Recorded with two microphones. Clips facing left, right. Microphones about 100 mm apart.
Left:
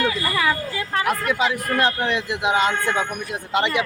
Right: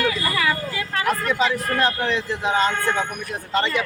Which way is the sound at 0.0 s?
15° left (ahead or behind).